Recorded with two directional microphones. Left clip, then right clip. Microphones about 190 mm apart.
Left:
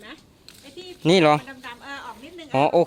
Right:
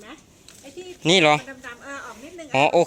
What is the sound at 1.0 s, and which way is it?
Speech, 30° left (ahead or behind).